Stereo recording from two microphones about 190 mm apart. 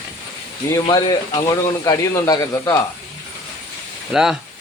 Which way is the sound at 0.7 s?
20° left (ahead or behind).